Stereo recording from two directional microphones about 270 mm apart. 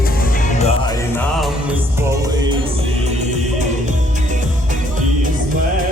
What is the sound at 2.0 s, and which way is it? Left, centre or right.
Music, centre.